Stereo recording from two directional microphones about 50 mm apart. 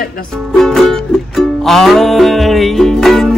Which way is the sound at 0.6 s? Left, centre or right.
Centre.